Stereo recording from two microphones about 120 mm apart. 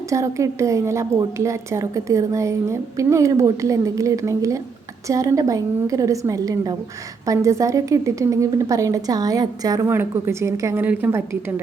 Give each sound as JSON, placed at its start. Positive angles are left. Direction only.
{"t": 0.1, "sound": "a woman's voice", "side_deg": -25}
{"t": 9.8, "sound": "a woman's voice", "side_deg": -20}